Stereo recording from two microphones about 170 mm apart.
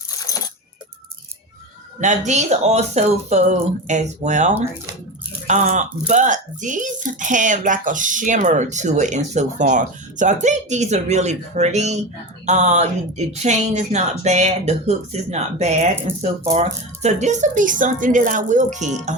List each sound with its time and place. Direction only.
0.2 s coin: 20° left (ahead or behind)
2.0 s speech: 45° right (ahead or behind)